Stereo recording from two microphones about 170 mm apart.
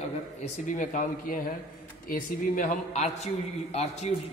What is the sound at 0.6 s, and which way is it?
A woman's voice, 50° left (ahead or behind).